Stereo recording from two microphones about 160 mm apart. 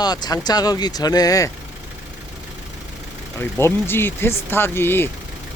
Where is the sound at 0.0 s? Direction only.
25° left (ahead or behind).